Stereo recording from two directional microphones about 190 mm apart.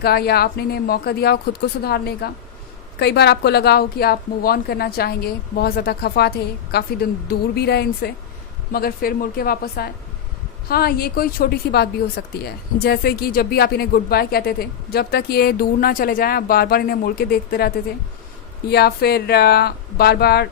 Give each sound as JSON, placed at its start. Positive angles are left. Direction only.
{"t": 0.0, "sound": "a woman's voice", "side_deg": 55}
{"t": 18.7, "sound": "a woman's voice", "side_deg": 55}